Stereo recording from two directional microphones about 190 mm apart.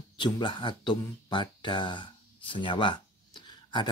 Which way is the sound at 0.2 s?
25° left (ahead or behind).